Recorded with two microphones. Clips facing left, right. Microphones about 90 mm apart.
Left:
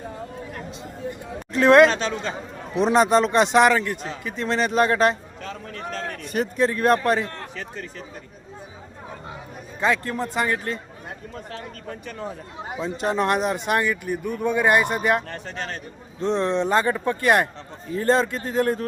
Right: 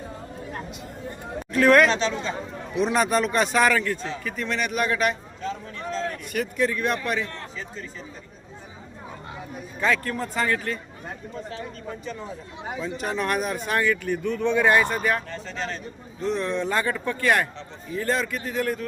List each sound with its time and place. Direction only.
1.5 s a man's voice: 25° left (ahead or behind)
1.9 s speech: 50° left (ahead or behind)
2.7 s a man's voice: 30° left (ahead or behind)
5.4 s a sound: 60° left (ahead or behind)
6.3 s a man's voice: 35° left (ahead or behind)
7.5 s speech: 65° left (ahead or behind)
9.8 s a man's voice: 20° left (ahead or behind)
12.8 s a man's voice: 30° left (ahead or behind)
15.3 s speech: 55° left (ahead or behind)
16.2 s a man's voice: 30° left (ahead or behind)